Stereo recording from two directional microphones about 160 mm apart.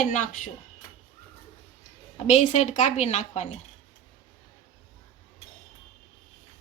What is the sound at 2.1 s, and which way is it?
Speech, 45° left (ahead or behind).